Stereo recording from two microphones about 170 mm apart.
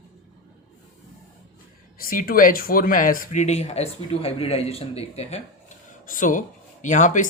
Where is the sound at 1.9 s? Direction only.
60° left (ahead or behind); by 5.4 s 40° left (ahead or behind).